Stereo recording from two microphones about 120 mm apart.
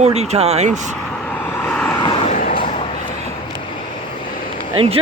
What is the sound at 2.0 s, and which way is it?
Vehicle, 45° left (ahead or behind).